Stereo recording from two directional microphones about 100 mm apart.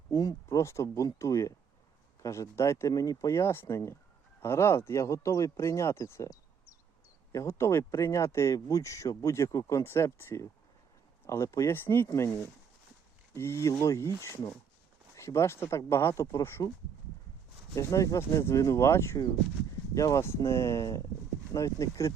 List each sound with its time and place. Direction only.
0.1 s speech: 35° left (ahead or behind)
13.3 s speech: 25° left (ahead or behind)
15.1 s speech: 30° left (ahead or behind)
17.7 s speech: 35° left (ahead or behind)